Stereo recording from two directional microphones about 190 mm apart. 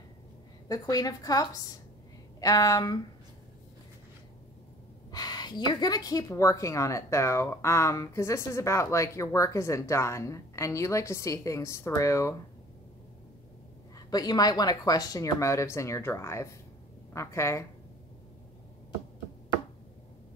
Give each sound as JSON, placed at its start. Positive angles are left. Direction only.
{"t": 0.7, "sound": "a woman's voice", "side_deg": 20}
{"t": 5.1, "sound": "a woman's voice", "side_deg": 20}
{"t": 13.9, "sound": "a woman's voice", "side_deg": 20}